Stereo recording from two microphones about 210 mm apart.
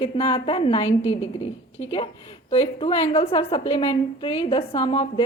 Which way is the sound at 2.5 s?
25° left (ahead or behind).